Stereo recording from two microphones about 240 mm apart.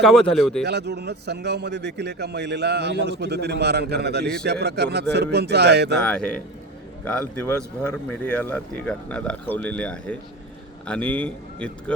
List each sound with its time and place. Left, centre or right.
0.0 s speech: centre
0.6 s a man's voice: right
6.0 s speech: centre